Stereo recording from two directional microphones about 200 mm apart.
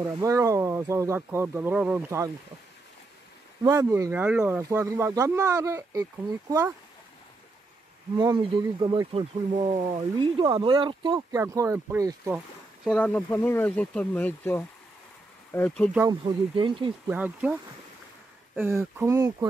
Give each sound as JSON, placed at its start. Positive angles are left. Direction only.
{"t": 0.0, "sound": "speech", "side_deg": -15}
{"t": 3.6, "sound": "speech", "side_deg": -15}
{"t": 8.2, "sound": "speech", "side_deg": -20}
{"t": 12.8, "sound": "speech", "side_deg": 5}
{"t": 16.1, "sound": "speech", "side_deg": -25}
{"t": 17.1, "sound": "speech", "side_deg": -5}